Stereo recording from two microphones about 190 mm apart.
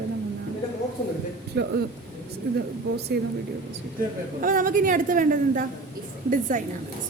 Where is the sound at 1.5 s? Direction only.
60° right (ahead or behind).